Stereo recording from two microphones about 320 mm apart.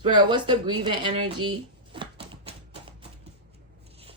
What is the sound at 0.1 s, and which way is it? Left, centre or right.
Speech, centre.